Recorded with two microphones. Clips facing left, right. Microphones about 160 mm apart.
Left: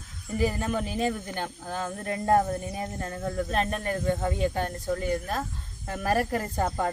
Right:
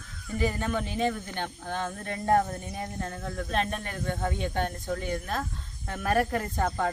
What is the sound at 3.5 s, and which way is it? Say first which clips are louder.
Speech: even; 40° left (ahead or behind).